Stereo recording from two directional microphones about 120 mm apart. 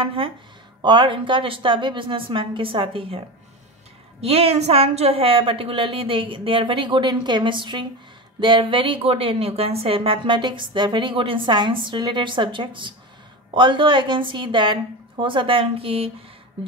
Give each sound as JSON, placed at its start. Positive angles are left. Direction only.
{"t": 0.0, "sound": "a woman's voice", "side_deg": -45}
{"t": 4.2, "sound": "a woman's voice", "side_deg": -55}